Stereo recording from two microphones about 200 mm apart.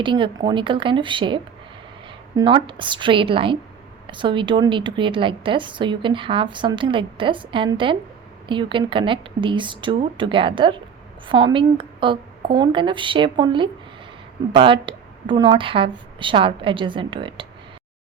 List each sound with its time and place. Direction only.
0.0 s a woman's voice: 25° right (ahead or behind)